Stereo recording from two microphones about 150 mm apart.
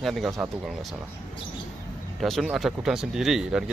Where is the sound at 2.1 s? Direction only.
Centre (ahead or behind).